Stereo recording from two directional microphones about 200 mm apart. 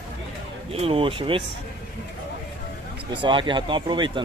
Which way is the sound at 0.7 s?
30° right (ahead or behind).